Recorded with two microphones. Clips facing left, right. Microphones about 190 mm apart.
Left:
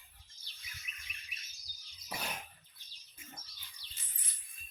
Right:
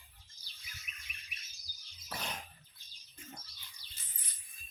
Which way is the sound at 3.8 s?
45° right (ahead or behind).